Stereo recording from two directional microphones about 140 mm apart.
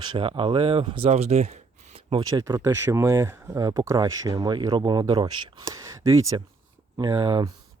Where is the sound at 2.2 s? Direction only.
25° right (ahead or behind).